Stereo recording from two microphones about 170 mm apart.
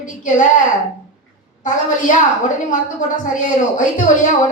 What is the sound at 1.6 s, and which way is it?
Speech, 45° left (ahead or behind).